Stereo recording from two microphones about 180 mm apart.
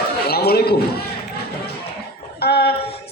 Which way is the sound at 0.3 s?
60° left (ahead or behind).